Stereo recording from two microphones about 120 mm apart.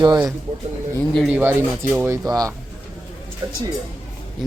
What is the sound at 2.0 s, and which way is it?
Speech, 30° right (ahead or behind).